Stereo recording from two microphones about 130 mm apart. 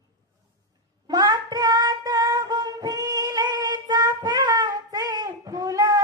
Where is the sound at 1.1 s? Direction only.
30° right (ahead or behind).